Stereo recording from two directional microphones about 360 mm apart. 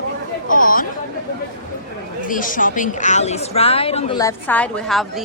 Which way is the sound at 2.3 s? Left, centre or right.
Left.